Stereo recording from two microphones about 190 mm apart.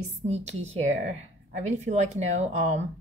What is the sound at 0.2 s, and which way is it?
A woman's voice, 35° right (ahead or behind).